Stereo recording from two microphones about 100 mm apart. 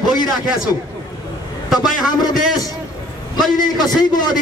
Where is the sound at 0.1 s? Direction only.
45° left (ahead or behind).